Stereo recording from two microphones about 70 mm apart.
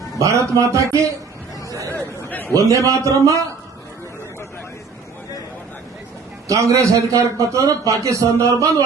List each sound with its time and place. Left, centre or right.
0.2 s a man's voice: right
1.9 s a sound: left
2.5 s a man's voice: right
6.5 s a man's voice: right